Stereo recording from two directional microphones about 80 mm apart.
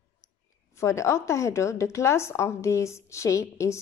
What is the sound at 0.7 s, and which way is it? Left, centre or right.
A woman's voice, left.